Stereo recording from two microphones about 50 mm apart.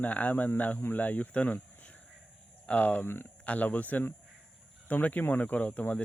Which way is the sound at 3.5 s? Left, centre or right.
Left.